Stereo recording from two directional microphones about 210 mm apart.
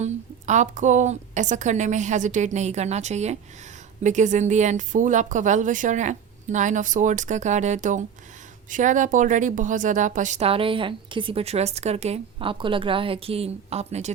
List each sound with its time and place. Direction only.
0.0 s a woman's voice: 35° right (ahead or behind)